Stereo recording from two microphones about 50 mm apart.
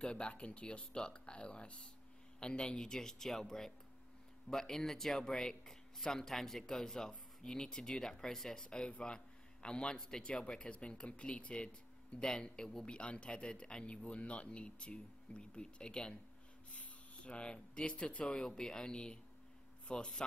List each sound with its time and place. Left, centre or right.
0.0 s a man's voice: centre